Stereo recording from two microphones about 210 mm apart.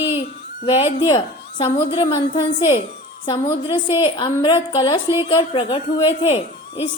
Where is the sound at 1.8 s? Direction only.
20° left (ahead or behind).